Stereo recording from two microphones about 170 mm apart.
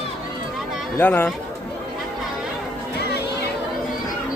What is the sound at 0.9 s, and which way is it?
Speech, 10° left (ahead or behind).